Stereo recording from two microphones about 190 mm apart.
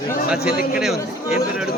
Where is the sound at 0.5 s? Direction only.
50° left (ahead or behind).